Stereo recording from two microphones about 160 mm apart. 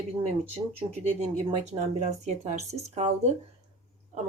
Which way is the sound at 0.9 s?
45° right (ahead or behind).